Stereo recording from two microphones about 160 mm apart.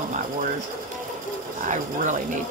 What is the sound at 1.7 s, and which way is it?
Speech, 50° right (ahead or behind).